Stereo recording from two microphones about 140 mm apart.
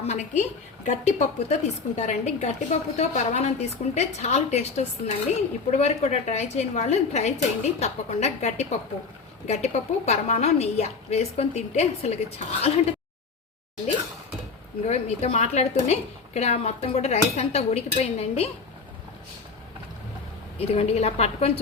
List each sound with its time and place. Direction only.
0.0 s a woman's voice: 55° left (ahead or behind)
14.8 s a woman's voice: 50° left (ahead or behind)
20.6 s a woman's voice: 45° left (ahead or behind)